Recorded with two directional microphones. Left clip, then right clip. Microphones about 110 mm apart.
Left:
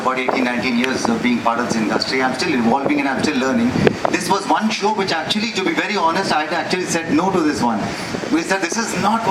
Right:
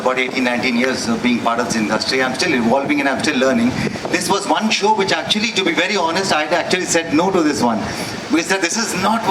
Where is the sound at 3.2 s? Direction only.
30° right (ahead or behind).